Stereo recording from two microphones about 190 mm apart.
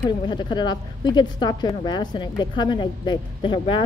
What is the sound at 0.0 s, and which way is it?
A woman's voice, 25° left (ahead or behind).